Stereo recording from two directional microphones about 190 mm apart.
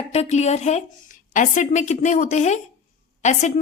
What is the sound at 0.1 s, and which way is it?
A woman's voice, 35° left (ahead or behind).